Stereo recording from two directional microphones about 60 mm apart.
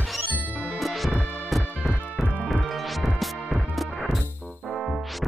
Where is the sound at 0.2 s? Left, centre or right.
Right.